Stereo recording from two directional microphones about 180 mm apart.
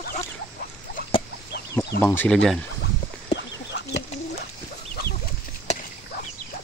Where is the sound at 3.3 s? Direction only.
70° left (ahead or behind).